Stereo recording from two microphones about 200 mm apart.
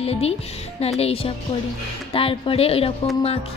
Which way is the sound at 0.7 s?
30° left (ahead or behind).